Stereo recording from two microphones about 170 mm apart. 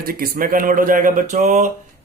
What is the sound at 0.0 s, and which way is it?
Speech, 60° right (ahead or behind).